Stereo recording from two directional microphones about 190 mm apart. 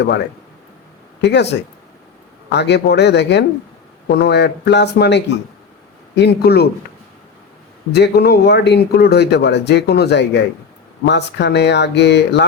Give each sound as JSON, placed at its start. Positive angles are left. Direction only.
{"t": 1.2, "sound": "speech", "side_deg": 65}
{"t": 7.9, "sound": "speech", "side_deg": 60}